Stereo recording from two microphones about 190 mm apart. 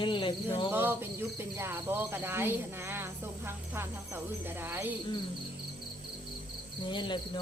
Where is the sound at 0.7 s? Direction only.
10° right (ahead or behind).